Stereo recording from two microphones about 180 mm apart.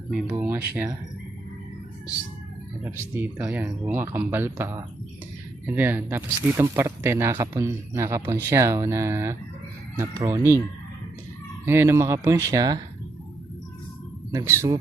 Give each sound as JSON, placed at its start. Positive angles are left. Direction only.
{"t": 0.1, "sound": "speech", "side_deg": -5}
{"t": 2.8, "sound": "speech", "side_deg": -10}
{"t": 11.6, "sound": "speech", "side_deg": -15}
{"t": 14.3, "sound": "speech", "side_deg": -15}